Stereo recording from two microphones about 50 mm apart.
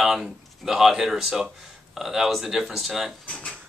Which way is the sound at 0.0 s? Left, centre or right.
Centre.